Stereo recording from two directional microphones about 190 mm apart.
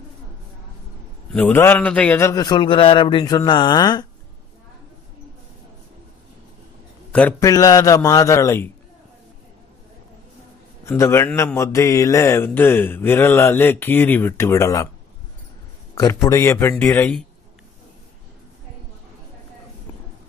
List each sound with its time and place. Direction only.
1.3 s a man's voice: 10° left (ahead or behind)
7.1 s speech: 5° left (ahead or behind)
10.9 s speech: 15° left (ahead or behind)
15.9 s a sound: 15° left (ahead or behind)
16.3 s speech: 15° left (ahead or behind)